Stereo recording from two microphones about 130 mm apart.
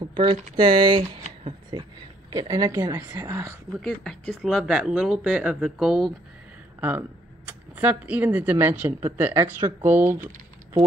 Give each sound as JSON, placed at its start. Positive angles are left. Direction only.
{"t": 0.0, "sound": "typing", "side_deg": -40}
{"t": 0.6, "sound": "speech", "side_deg": -40}
{"t": 2.7, "sound": "speech", "side_deg": -20}
{"t": 3.7, "sound": "speech", "side_deg": 0}
{"t": 6.8, "sound": "speech", "side_deg": -15}